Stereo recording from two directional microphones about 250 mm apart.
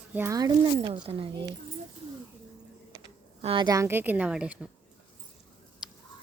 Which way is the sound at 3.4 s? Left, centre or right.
Right.